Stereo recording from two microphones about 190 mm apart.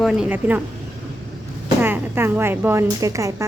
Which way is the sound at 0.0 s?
5° right (ahead or behind).